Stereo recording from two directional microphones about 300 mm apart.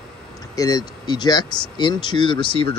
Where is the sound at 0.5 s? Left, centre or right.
Centre.